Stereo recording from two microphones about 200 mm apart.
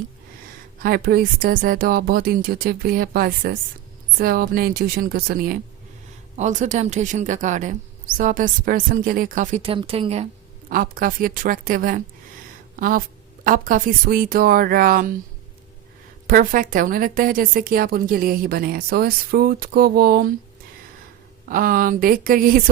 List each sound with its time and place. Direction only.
0.8 s a woman's voice: 50° right (ahead or behind)
6.3 s speech: 35° right (ahead or behind)
10.7 s a woman's voice: 45° right (ahead or behind)
16.2 s a woman's voice: 45° right (ahead or behind)
21.4 s a woman's voice: 45° right (ahead or behind)